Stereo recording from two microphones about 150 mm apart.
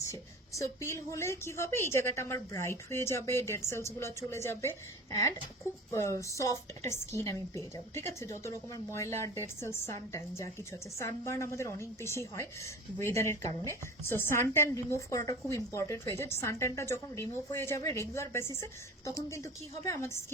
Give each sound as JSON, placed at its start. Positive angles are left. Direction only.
{"t": 0.1, "sound": "a woman's voice", "side_deg": 20}
{"t": 5.9, "sound": "a woman's voice", "side_deg": 20}